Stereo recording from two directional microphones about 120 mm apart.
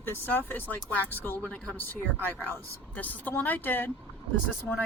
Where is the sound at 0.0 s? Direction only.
15° left (ahead or behind).